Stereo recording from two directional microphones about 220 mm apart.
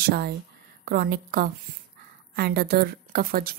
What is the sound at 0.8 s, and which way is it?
A woman's voice, 45° right (ahead or behind).